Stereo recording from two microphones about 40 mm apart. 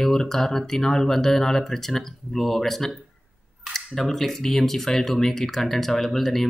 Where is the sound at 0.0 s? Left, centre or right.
Centre.